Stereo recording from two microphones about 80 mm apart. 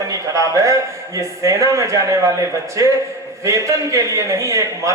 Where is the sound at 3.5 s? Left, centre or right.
Right.